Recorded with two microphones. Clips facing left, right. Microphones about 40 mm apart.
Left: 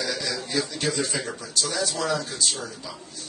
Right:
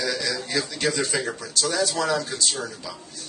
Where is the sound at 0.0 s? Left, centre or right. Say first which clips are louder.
Right 2 dB; right.